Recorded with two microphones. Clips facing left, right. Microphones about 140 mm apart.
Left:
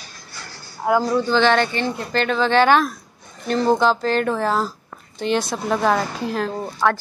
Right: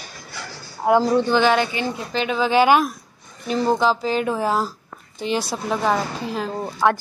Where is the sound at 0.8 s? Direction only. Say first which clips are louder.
Right 2 dB; 25° right (ahead or behind).